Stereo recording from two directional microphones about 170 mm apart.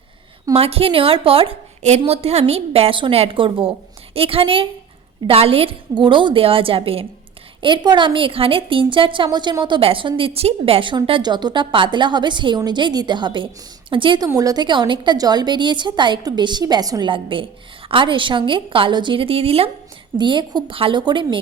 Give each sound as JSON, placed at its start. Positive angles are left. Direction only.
{"t": 0.5, "sound": "a woman's voice", "side_deg": -35}